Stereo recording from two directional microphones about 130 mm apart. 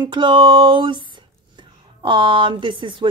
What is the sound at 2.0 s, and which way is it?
Speech, 40° right (ahead or behind).